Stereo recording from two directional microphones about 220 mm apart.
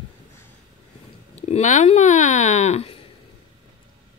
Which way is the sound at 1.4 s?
30° left (ahead or behind).